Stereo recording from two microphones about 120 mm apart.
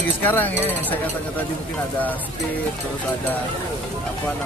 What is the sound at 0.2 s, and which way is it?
Speech, 15° left (ahead or behind).